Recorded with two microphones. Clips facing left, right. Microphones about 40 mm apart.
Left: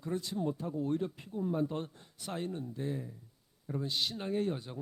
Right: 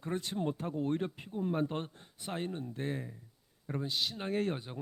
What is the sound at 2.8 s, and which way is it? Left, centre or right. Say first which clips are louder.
Speech: even; right.